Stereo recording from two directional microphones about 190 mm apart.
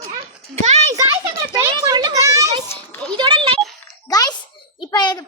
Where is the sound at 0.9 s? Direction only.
15° right (ahead or behind).